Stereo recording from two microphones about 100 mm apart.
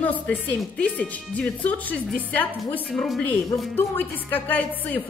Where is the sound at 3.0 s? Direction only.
5° left (ahead or behind).